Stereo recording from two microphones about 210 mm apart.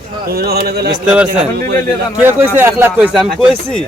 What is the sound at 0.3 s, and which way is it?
Speech, 50° right (ahead or behind).